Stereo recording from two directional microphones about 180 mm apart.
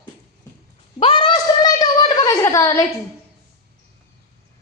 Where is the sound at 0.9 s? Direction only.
30° left (ahead or behind); by 2.8 s 15° left (ahead or behind).